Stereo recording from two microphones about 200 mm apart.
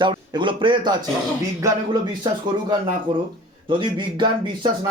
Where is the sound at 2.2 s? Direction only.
20° right (ahead or behind).